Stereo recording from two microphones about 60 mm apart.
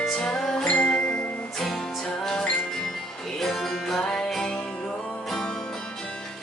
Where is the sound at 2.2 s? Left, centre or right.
Centre.